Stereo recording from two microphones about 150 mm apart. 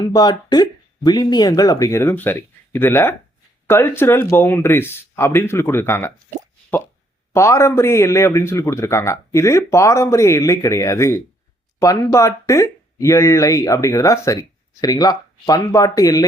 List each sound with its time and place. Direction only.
0.1 s speech: 30° left (ahead or behind)
7.3 s speech: 20° left (ahead or behind)